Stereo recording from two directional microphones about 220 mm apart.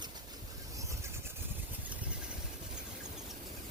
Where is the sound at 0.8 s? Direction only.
15° right (ahead or behind).